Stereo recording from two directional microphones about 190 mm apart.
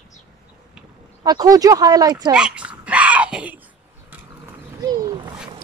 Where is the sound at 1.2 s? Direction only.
20° right (ahead or behind).